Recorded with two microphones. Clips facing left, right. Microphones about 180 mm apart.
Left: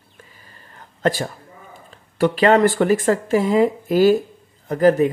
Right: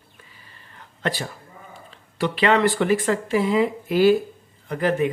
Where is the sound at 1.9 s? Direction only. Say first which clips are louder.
Left 6 dB; 45° left (ahead or behind).